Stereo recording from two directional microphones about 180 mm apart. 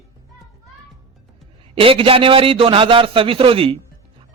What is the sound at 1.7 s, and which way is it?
Speech, 30° right (ahead or behind).